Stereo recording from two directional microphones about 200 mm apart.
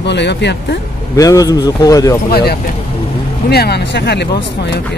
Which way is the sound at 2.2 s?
50° left (ahead or behind).